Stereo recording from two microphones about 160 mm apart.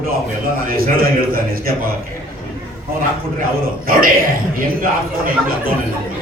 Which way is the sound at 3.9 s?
65° right (ahead or behind).